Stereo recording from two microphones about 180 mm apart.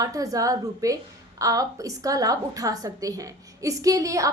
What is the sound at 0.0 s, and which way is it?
A woman's voice, 20° right (ahead or behind).